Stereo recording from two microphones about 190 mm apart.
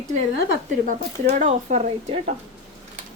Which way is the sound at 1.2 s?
35° right (ahead or behind).